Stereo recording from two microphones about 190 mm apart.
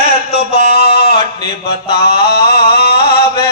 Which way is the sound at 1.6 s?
55° left (ahead or behind).